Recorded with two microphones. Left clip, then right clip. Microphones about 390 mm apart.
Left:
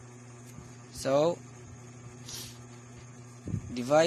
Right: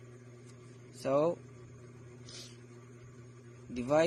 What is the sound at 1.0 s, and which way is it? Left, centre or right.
Speech, right.